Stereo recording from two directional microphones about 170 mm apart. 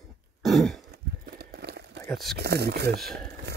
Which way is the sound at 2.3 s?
70° right (ahead or behind).